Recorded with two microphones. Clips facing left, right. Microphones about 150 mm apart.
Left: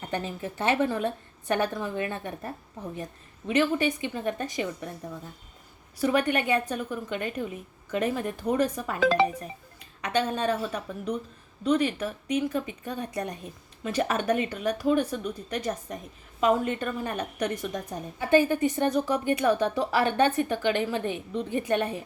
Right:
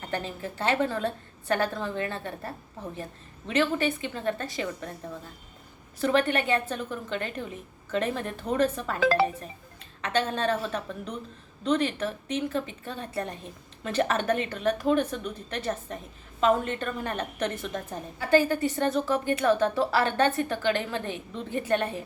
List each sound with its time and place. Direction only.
0.1 s a woman's voice: 20° left (ahead or behind)
6.0 s a woman's voice: 10° left (ahead or behind)
9.0 s speech: 5° right (ahead or behind)
10.0 s a woman's voice: 10° left (ahead or behind)